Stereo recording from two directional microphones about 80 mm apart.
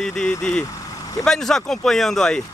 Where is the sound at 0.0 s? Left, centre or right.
Centre.